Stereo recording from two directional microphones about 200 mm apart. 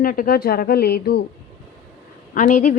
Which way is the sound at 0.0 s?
45° left (ahead or behind).